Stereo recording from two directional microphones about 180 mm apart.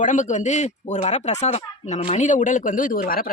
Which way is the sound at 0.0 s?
45° left (ahead or behind).